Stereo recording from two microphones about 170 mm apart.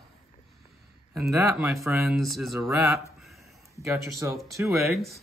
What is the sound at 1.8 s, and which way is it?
Speech, 15° right (ahead or behind).